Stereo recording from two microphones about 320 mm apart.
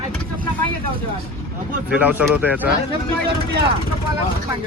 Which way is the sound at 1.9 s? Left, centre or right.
Centre.